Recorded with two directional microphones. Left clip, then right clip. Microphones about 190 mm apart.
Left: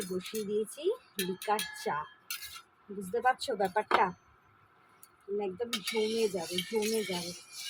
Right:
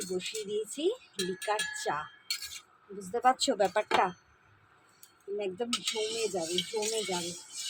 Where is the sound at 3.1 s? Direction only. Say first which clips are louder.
Right 3 dB; 40° right (ahead or behind).